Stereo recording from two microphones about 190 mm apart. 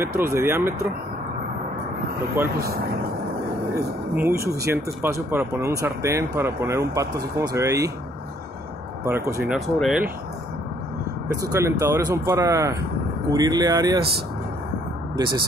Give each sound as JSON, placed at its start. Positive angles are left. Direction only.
{"t": 0.0, "sound": "speech", "side_deg": -15}
{"t": 4.1, "sound": "speech", "side_deg": -10}
{"t": 9.0, "sound": "speech", "side_deg": -15}
{"t": 11.4, "sound": "speech", "side_deg": -15}